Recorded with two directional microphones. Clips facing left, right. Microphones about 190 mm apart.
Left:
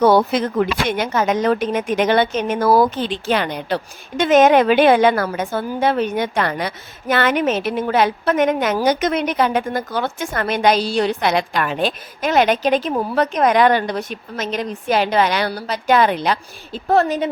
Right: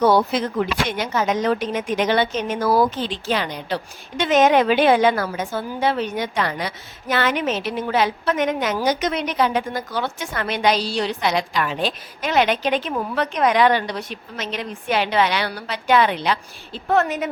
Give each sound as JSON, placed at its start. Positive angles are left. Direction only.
{"t": 0.0, "sound": "a woman's voice", "side_deg": 55}